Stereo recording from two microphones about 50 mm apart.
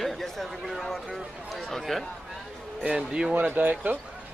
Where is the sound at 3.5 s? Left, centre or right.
Right.